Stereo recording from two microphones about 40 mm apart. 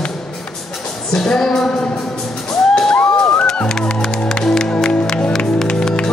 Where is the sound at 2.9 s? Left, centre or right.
Left.